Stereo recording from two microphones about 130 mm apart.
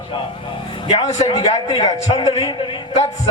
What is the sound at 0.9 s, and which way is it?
A man's voice, 55° left (ahead or behind).